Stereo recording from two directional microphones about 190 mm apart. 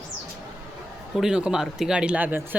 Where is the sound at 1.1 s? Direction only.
5° right (ahead or behind).